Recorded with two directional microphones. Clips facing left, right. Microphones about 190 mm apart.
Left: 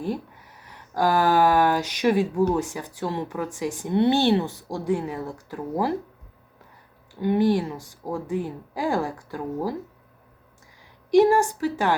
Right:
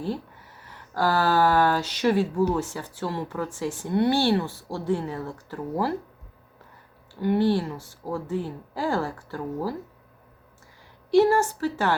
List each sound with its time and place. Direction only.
0.0 s speech: 15° left (ahead or behind)
7.1 s speech: 15° left (ahead or behind)
11.1 s speech: 15° left (ahead or behind)